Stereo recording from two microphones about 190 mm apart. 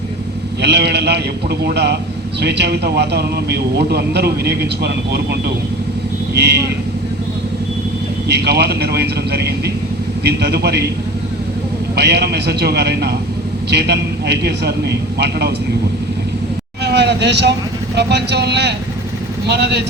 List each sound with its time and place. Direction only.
0.6 s a man's voice: 60° right (ahead or behind)
8.3 s a man's voice: 60° right (ahead or behind)
11.9 s a man's voice: 60° right (ahead or behind)
16.8 s vehicle: 60° right (ahead or behind)
17.9 s a man's voice: 65° right (ahead or behind)